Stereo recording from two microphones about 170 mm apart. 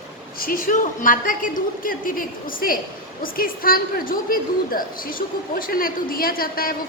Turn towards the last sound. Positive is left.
turn(degrees=55)  # may be behind; listen again after turning